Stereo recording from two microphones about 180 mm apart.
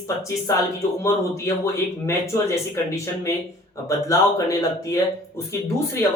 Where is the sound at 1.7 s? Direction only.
15° left (ahead or behind).